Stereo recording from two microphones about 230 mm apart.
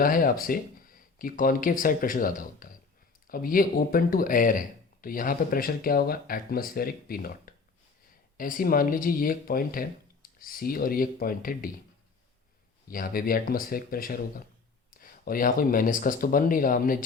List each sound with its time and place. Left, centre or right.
0.0 s speech: left
12.9 s speech: left